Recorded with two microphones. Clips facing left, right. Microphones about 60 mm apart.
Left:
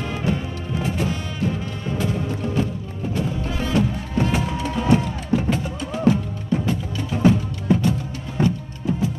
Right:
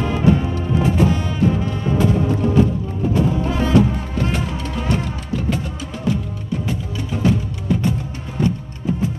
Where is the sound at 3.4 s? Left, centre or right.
Right.